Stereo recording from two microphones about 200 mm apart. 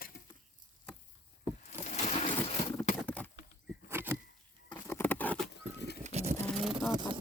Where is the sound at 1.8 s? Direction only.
35° left (ahead or behind).